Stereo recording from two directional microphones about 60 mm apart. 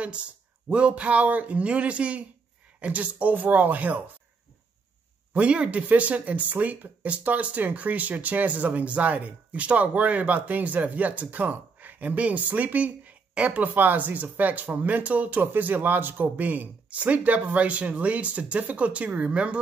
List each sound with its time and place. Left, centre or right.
0.7 s speech: centre
5.3 s speech: right